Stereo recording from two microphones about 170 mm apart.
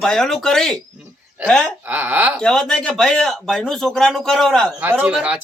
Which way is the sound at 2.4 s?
5° left (ahead or behind).